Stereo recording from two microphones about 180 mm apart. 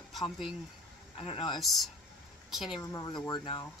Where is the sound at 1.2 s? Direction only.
30° left (ahead or behind).